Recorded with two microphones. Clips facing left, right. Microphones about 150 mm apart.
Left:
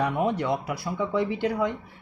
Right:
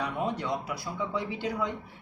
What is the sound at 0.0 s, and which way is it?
Speech, 60° left (ahead or behind).